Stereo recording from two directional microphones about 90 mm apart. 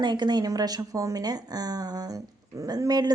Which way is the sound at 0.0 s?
55° right (ahead or behind).